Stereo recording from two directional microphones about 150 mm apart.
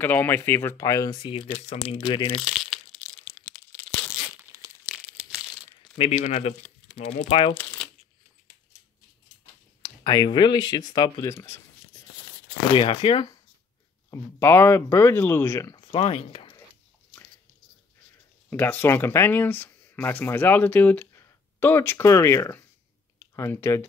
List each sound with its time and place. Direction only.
0.0 s speech: 15° left (ahead or behind)
1.9 s speech: 40° left (ahead or behind)
2.4 s a sound: centre (ahead or behind)
5.9 s speech: 45° left (ahead or behind)
7.2 s speech: 35° left (ahead or behind)
9.8 s speech: 30° left (ahead or behind)
12.7 s speech: 35° left (ahead or behind)
14.1 s speech: 15° left (ahead or behind)
15.8 s speech: 40° left (ahead or behind)
18.5 s speech: 15° left (ahead or behind)